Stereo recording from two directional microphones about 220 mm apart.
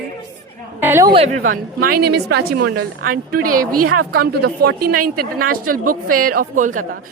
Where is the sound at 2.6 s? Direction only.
90° right.